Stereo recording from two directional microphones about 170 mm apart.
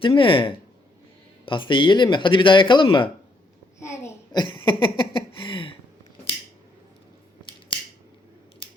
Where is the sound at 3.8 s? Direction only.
15° left (ahead or behind).